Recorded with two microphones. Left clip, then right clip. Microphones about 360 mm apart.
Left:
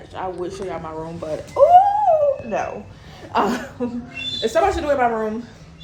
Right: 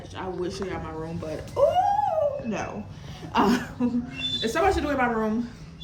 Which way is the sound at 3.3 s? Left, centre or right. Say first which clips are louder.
Left 3 dB; centre.